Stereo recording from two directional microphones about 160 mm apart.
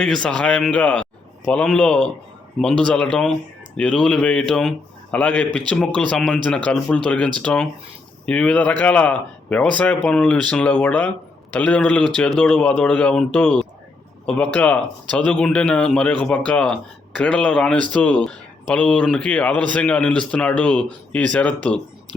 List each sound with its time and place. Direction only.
0.0 s speech: 5° left (ahead or behind)